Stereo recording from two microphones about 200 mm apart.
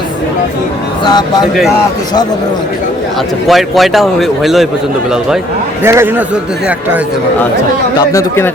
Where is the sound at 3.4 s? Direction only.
Centre (ahead or behind).